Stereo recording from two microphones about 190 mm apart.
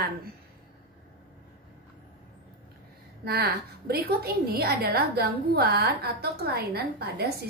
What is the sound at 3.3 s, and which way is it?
A woman's voice, 55° right (ahead or behind).